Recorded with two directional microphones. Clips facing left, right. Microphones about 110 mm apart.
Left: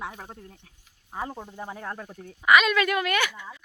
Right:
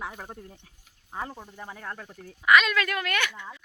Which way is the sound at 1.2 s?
20° left (ahead or behind).